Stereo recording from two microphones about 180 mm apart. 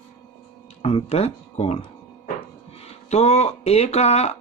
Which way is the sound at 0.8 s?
35° left (ahead or behind).